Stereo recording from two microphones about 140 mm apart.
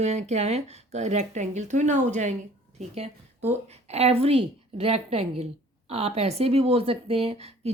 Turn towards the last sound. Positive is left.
turn(degrees=-45)  # may be behind; listen again after turning